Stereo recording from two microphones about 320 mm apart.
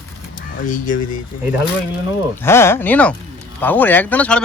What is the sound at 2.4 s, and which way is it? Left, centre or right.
Speech, centre.